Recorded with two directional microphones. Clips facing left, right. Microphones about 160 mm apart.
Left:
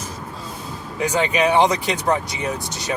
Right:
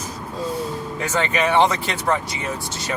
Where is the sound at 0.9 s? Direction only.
15° left (ahead or behind).